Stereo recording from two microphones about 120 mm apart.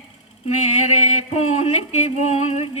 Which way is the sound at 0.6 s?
65° left (ahead or behind).